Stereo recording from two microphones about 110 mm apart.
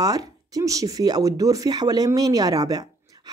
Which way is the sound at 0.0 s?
35° right (ahead or behind).